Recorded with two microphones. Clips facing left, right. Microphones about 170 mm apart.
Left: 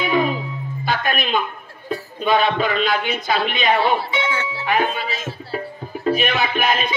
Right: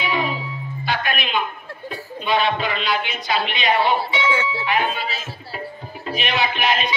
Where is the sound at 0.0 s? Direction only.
45° left (ahead or behind).